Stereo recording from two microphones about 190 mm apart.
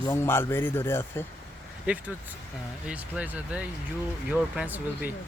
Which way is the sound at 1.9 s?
10° right (ahead or behind).